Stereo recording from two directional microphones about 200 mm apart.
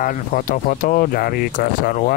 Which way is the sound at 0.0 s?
45° left (ahead or behind).